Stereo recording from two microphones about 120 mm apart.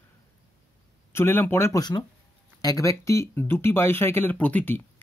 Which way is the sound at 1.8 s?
35° left (ahead or behind).